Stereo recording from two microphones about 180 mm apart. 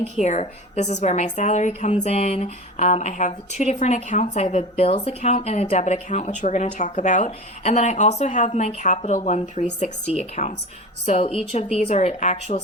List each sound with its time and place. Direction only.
0.0 s speech: 40° left (ahead or behind)